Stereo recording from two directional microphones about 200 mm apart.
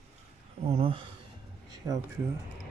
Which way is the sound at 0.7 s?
25° right (ahead or behind).